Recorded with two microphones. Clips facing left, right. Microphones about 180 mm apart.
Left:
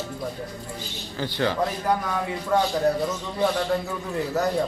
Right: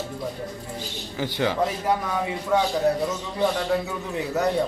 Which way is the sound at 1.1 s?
15° right (ahead or behind).